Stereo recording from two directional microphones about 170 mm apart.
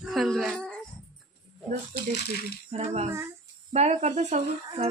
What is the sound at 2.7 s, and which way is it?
Speech, 40° right (ahead or behind).